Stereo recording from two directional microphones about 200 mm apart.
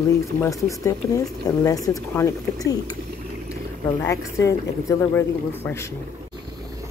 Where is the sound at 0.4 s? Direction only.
15° left (ahead or behind).